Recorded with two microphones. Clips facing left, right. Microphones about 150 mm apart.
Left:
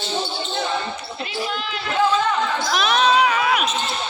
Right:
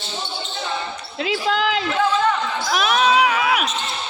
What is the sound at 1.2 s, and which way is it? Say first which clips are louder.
Basketball bounce: right 8 dB; 90° right.